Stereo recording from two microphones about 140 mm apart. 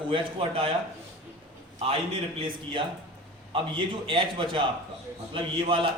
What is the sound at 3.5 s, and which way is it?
A man's voice, 35° right (ahead or behind).